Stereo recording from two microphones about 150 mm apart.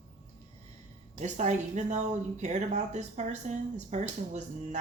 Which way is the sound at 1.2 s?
50° right (ahead or behind).